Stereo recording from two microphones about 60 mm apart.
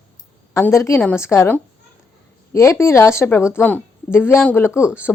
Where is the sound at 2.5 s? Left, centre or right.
Left.